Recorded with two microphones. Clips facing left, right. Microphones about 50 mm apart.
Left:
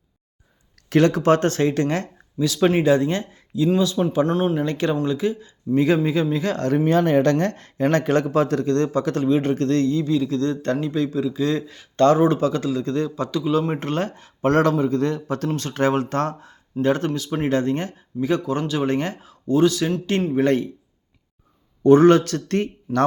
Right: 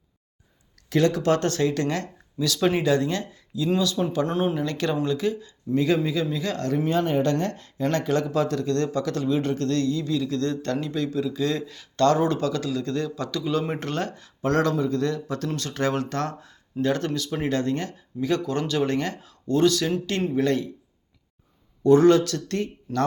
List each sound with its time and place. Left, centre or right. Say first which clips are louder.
0.9 s speech: left 4 dB; left
1.2 s speech: left 4 dB; left
2.4 s speech: left 4 dB; centre
4.3 s speech: left 3 dB; centre
4.6 s speech: left 3 dB; centre
5.7 s speech: left 4 dB; left
6.8 s speech: left 6 dB; left; by 19.9 s centre
20.3 s speech: left 4 dB; left
21.8 s speech: left 3 dB; left